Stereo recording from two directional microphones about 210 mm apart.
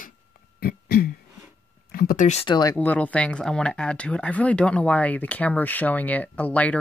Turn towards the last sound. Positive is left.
turn(degrees=5)  # may be behind; listen again after turning